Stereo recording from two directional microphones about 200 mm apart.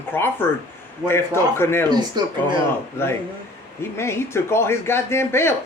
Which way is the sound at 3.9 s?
15° left (ahead or behind).